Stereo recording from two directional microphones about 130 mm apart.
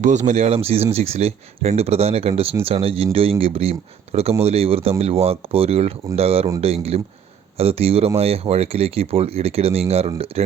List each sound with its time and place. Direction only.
0.0 s speech: 70° right (ahead or behind); by 10.5 s 50° right (ahead or behind)